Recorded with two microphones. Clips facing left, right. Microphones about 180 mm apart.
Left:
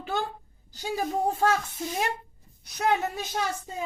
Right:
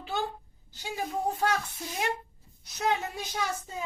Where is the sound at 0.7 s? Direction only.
40° left (ahead or behind).